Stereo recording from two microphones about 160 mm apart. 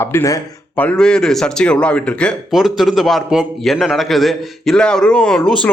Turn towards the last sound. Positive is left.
turn(degrees=5)  # may be behind; listen again after turning